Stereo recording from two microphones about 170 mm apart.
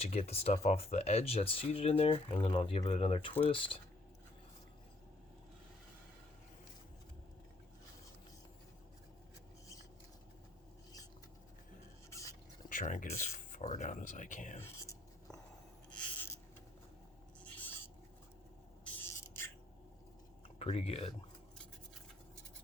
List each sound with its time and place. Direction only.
0.0 s speech: 40° left (ahead or behind)
12.6 s speech: 50° left (ahead or behind)
15.9 s a sound: 5° left (ahead or behind)
17.4 s owl: 10° left (ahead or behind)
18.9 s a sound: 10° left (ahead or behind)
20.6 s speech: 35° left (ahead or behind)